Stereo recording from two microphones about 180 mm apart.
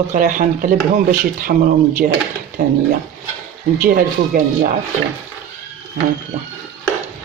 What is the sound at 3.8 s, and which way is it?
Speech, 50° right (ahead or behind).